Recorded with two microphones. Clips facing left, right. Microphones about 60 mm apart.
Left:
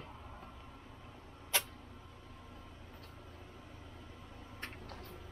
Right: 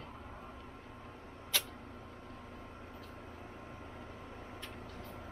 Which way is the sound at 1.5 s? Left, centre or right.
Left.